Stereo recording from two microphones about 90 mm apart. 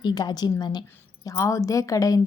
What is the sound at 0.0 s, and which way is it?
Speech, 50° left (ahead or behind).